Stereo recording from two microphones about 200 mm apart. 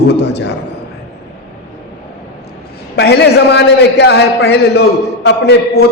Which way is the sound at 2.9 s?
55° left (ahead or behind).